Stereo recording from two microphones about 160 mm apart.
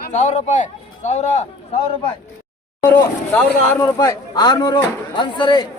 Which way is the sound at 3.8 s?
20° left (ahead or behind).